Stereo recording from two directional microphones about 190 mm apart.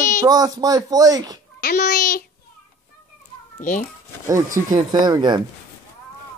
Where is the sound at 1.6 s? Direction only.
55° left (ahead or behind).